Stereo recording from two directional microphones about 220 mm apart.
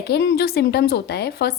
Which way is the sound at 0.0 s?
50° left (ahead or behind).